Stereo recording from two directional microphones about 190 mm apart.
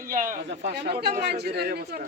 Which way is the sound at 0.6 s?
60° right (ahead or behind).